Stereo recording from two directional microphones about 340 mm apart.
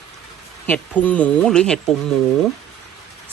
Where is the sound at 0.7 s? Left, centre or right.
Centre.